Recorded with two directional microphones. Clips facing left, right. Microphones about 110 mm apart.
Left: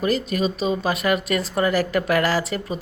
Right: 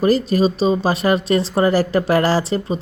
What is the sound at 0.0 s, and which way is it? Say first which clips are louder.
Speech: right 6 dB; 35° right (ahead or behind).